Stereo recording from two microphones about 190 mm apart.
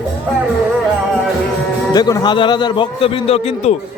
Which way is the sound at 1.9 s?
20° left (ahead or behind).